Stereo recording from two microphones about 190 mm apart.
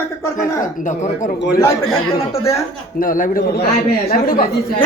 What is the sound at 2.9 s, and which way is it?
A man's voice, 45° left (ahead or behind).